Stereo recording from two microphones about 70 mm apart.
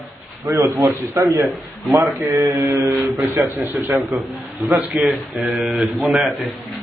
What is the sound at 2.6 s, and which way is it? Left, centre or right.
Speech, right.